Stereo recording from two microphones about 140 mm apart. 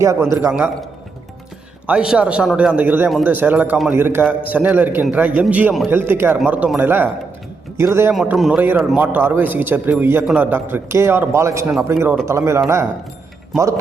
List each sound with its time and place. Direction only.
0.0 s speech: 20° right (ahead or behind)
1.9 s a man's voice: 5° right (ahead or behind)
8.1 s a man's voice: 5° right (ahead or behind); by 12.9 s 20° right (ahead or behind)